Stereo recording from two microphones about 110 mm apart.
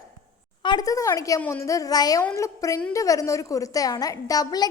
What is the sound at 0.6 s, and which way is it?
A woman's voice, 40° left (ahead or behind).